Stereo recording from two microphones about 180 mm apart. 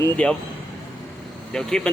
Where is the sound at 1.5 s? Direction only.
5° left (ahead or behind).